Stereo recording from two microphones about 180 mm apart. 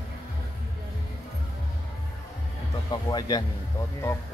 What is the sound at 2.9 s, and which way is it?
Speech, 20° left (ahead or behind).